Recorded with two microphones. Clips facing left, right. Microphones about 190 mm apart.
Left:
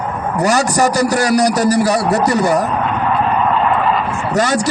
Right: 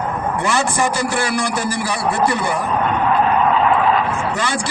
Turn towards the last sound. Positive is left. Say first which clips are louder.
# left 7 dB
turn(degrees=40)  # may be behind; listen again after turning